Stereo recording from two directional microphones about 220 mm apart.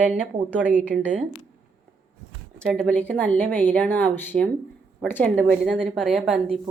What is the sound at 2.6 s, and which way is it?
A woman's voice, centre (ahead or behind).